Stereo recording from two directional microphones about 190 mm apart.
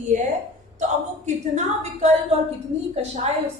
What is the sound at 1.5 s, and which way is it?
Speech, 35° right (ahead or behind).